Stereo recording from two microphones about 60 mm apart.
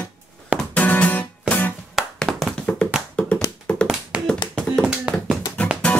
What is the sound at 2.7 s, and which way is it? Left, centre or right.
Tap, left.